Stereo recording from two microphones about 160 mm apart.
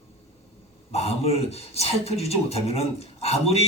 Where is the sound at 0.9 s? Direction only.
40° left (ahead or behind).